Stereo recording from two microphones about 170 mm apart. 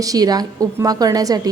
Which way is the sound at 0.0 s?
20° right (ahead or behind).